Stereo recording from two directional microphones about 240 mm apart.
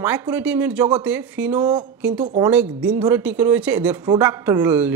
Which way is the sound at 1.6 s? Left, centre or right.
Centre.